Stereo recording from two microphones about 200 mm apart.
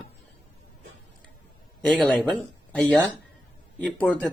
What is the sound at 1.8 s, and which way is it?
Speech, 5° left (ahead or behind).